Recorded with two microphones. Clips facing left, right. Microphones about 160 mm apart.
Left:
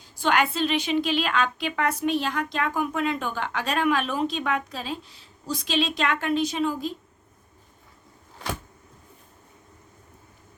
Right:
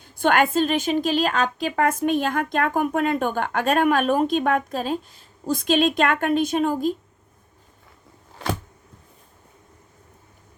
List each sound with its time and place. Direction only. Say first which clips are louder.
0.0 s speech: right 4 dB; 55° right (ahead or behind)